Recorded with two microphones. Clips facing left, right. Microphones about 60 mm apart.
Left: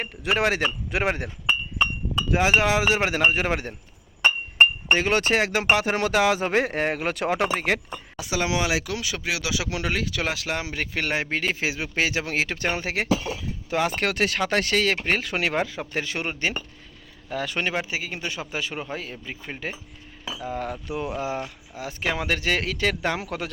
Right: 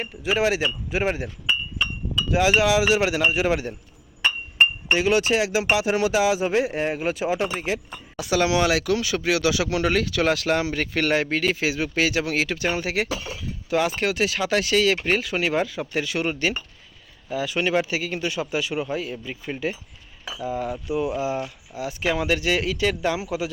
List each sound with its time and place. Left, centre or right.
0.0 s speech: left
2.3 s speech: left
4.9 s speech: left
8.2 s speech: centre; by 13.9 s left
13.9 s speech: left
15.5 s speech: left
17.2 s speech: left
17.7 s speech: left